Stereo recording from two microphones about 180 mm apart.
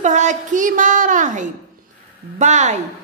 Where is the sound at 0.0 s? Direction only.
40° right (ahead or behind).